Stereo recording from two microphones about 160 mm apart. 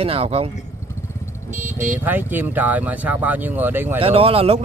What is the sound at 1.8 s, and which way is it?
Speech, 10° right (ahead or behind).